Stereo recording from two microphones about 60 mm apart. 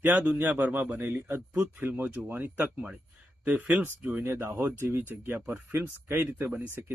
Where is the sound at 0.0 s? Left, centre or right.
Right.